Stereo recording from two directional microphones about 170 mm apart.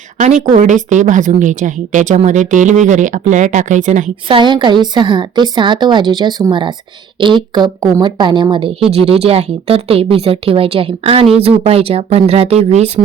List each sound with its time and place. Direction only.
0.2 s a woman's voice: 45° right (ahead or behind)
4.3 s a woman's voice: 30° right (ahead or behind)